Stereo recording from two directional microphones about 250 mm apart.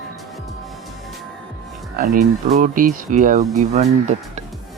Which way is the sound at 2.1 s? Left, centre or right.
Right.